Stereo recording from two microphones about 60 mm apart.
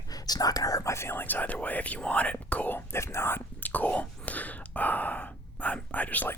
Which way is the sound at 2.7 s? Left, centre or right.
Left.